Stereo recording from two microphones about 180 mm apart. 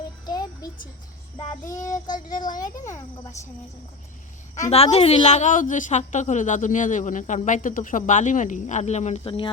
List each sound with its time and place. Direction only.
0.3 s child singing: 20° left (ahead or behind)
4.7 s a woman's voice: 35° left (ahead or behind)